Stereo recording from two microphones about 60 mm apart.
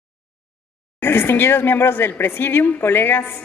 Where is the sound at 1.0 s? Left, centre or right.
Left.